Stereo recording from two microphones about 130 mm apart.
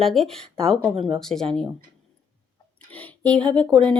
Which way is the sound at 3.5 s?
35° right (ahead or behind).